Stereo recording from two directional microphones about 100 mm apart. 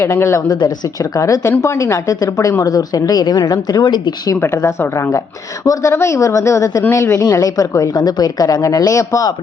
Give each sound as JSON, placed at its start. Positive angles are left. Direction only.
{"t": 0.0, "sound": "a woman's voice", "side_deg": 25}
{"t": 0.4, "sound": "a woman's voice", "side_deg": 40}
{"t": 4.4, "sound": "a woman's voice", "side_deg": 30}